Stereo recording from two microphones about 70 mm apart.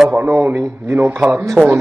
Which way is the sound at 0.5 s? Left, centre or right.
Right.